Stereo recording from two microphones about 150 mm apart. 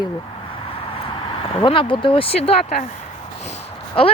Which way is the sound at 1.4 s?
35° left (ahead or behind).